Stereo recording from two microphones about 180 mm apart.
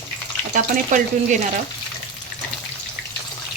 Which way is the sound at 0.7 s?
45° right (ahead or behind).